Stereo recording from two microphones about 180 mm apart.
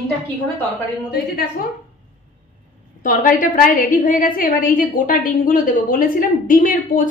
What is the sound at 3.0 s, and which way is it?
A woman's voice, 50° left (ahead or behind).